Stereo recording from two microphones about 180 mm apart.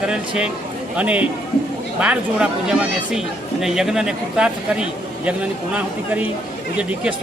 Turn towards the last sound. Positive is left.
turn(degrees=-5)  # may be behind; listen again after turning